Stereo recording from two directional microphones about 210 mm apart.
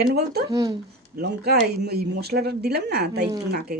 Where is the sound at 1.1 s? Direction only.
50° right (ahead or behind).